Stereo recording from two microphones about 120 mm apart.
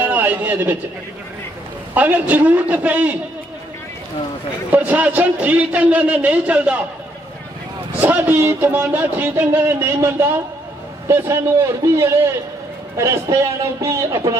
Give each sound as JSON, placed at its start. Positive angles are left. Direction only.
{"t": 0.0, "sound": "a sound", "side_deg": -15}
{"t": 2.0, "sound": "speech", "side_deg": -15}
{"t": 4.7, "sound": "speech", "side_deg": -15}
{"t": 8.0, "sound": "a man's voice", "side_deg": -15}